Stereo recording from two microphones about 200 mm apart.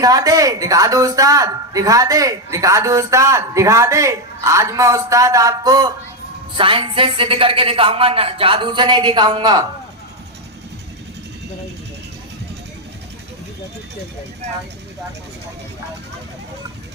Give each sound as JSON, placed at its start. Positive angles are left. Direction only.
{"t": 0.0, "sound": "a woman's voice", "side_deg": -15}